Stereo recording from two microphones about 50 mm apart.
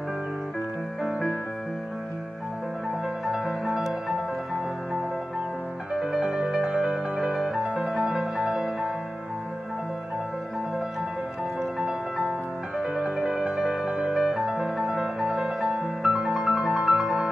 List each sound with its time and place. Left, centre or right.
6.1 s music: centre
13.0 s music: centre
14.5 s music: right